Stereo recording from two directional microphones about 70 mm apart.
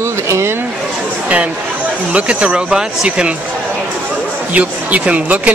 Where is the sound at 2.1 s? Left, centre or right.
Centre.